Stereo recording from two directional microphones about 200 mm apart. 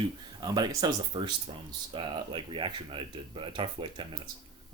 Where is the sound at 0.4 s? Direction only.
20° right (ahead or behind).